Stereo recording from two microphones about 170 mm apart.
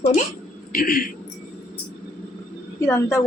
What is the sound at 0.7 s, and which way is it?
Speech, 60° left (ahead or behind).